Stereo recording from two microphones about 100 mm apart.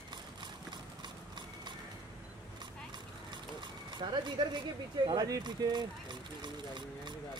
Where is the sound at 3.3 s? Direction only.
50° right (ahead or behind).